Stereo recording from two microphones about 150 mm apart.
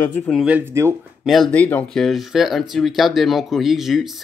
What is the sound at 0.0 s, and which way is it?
Speech, 15° left (ahead or behind).